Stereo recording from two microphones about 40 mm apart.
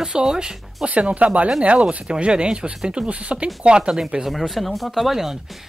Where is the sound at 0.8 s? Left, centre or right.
Right.